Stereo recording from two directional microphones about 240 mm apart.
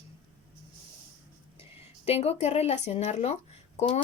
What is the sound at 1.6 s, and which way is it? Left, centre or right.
Speech, left.